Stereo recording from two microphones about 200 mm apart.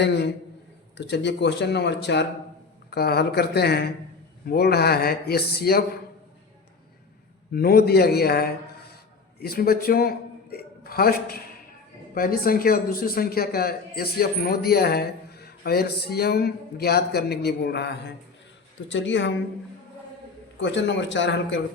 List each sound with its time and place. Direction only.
0.0 s a man's voice: 60° left (ahead or behind)
7.5 s a man's voice: 50° left (ahead or behind)
18.9 s a woman's voice: 65° left (ahead or behind)
20.6 s speech: 65° left (ahead or behind)